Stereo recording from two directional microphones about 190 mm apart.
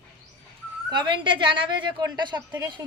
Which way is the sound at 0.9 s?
25° right (ahead or behind).